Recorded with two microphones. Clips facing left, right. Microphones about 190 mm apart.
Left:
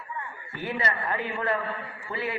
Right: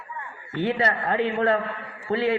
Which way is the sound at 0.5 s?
70° right (ahead or behind).